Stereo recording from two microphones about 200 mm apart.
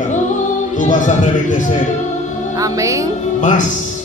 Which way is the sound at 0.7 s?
40° left (ahead or behind).